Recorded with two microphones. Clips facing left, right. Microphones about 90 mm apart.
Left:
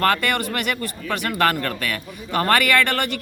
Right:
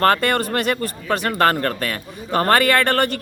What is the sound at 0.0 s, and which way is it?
Speech, 35° right (ahead or behind).